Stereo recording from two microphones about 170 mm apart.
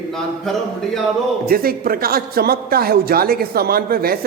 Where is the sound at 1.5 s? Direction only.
60° right (ahead or behind).